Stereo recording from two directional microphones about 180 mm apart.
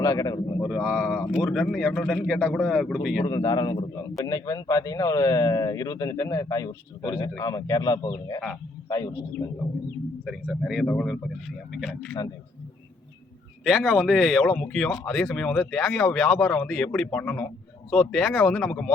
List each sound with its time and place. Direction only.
0.0 s speech: 20° left (ahead or behind)
0.6 s speech: centre (ahead or behind)
3.2 s speech: 25° left (ahead or behind)
10.2 s speech: centre (ahead or behind)
13.7 s speech: centre (ahead or behind)